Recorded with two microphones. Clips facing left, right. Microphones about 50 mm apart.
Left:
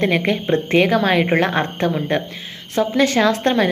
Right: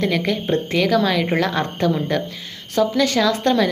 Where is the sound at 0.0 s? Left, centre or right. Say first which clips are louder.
Left 2 dB; left.